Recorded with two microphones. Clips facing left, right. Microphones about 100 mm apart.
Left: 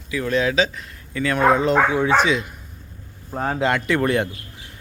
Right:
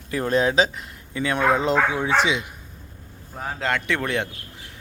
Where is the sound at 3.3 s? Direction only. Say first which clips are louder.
Left 8 dB; 75° left (ahead or behind).